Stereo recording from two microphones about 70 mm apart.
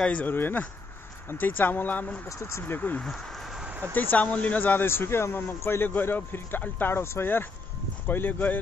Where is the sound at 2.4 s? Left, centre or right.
Left.